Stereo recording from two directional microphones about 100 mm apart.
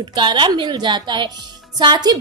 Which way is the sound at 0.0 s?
50° right (ahead or behind).